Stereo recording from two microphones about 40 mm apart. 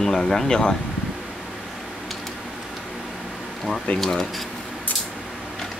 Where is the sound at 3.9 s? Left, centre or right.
Left.